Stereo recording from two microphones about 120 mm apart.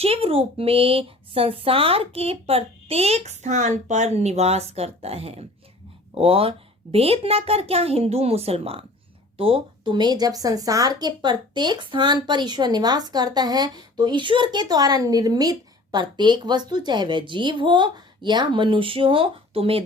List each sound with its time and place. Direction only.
0.0 s speech: 55° right (ahead or behind)